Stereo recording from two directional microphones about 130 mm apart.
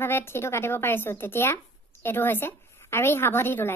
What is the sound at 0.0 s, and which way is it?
Speech, 20° left (ahead or behind).